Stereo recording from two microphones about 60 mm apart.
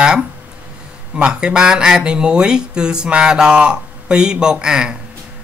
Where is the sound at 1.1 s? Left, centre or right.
Centre.